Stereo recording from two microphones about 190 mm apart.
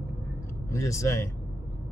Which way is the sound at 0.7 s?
15° left (ahead or behind).